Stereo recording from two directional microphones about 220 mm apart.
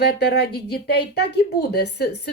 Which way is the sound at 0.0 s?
50° left (ahead or behind).